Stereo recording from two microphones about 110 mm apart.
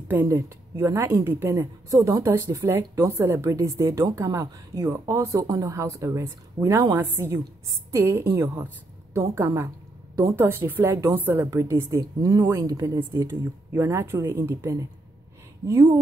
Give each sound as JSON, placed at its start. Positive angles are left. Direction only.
{"t": 0.1, "sound": "a woman's voice", "side_deg": -20}
{"t": 10.9, "sound": "a woman's voice", "side_deg": -30}
{"t": 11.1, "sound": "a woman's voice", "side_deg": -20}